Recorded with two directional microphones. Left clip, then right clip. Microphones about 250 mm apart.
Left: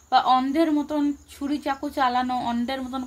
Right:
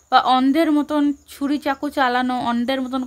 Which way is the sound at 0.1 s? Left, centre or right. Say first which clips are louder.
Right 4 dB; right.